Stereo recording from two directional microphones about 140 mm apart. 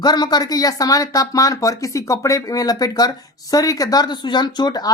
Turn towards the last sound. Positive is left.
turn(degrees=30)  # may be behind; listen again after turning